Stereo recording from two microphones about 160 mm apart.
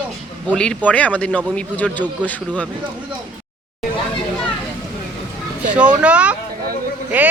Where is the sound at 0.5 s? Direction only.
5° left (ahead or behind).